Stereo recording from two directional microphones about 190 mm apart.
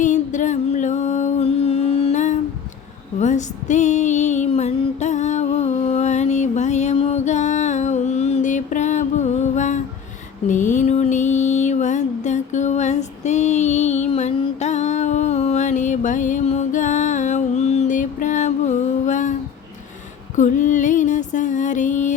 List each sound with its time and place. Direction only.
0.0 s music: 40° left (ahead or behind)
3.2 s female singing: 40° left (ahead or behind)
10.5 s music: 40° left (ahead or behind)
20.3 s music: 40° left (ahead or behind)